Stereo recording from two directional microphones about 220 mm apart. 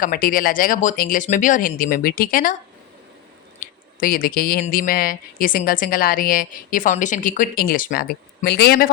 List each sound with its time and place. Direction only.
0.0 s a woman's voice: 40° left (ahead or behind)
4.0 s a woman's voice: 40° left (ahead or behind)